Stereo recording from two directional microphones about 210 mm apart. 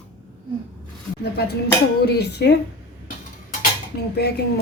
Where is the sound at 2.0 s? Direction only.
50° left (ahead or behind).